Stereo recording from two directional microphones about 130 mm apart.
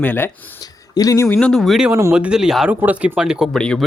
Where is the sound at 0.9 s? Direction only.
25° left (ahead or behind).